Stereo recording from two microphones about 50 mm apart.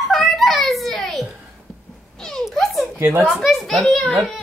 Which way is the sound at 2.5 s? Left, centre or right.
Centre.